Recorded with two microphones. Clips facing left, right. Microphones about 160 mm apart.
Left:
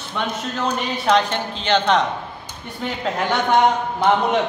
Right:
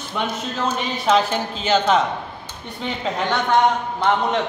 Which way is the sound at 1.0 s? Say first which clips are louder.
Even; 5° right (ahead or behind).